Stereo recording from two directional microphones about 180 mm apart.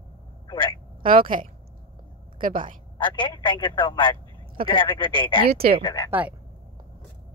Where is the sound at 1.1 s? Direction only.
50° right (ahead or behind).